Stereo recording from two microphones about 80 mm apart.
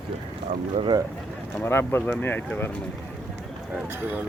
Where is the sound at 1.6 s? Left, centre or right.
Left.